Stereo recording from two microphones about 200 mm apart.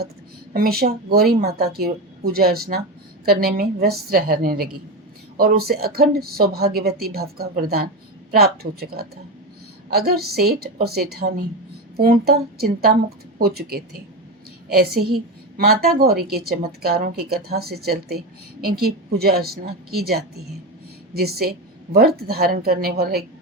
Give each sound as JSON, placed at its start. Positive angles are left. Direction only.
{"t": 0.5, "sound": "a woman's voice", "side_deg": -50}